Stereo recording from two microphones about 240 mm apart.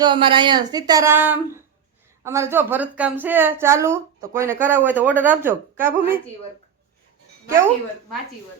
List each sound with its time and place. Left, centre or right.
0.0 s a woman's voice: right